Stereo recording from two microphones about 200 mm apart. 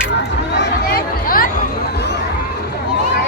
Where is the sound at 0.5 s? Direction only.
50° left (ahead or behind).